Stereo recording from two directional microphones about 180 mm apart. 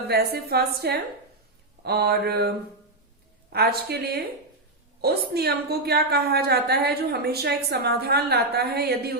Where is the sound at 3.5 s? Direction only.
60° right (ahead or behind).